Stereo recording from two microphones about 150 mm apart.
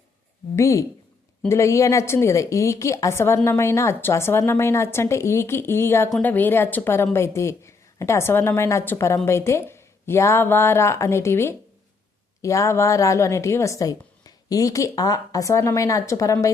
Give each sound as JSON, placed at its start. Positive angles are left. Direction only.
{"t": 0.5, "sound": "a woman's voice", "side_deg": 20}